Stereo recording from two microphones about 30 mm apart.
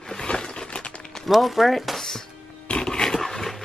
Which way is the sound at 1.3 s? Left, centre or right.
Centre.